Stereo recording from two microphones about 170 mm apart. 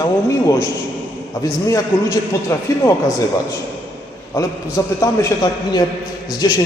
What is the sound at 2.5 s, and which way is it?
Speech, 15° left (ahead or behind).